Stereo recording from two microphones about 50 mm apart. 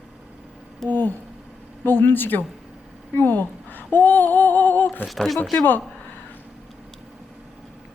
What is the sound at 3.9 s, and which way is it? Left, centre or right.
Female singing, left.